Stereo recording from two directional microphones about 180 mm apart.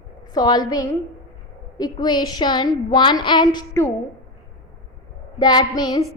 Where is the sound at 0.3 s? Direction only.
20° left (ahead or behind).